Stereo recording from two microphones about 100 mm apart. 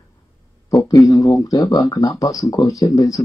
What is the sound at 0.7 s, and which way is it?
Speech, 40° left (ahead or behind).